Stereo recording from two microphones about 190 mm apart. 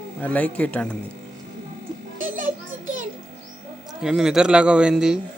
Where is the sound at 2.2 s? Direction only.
45° right (ahead or behind).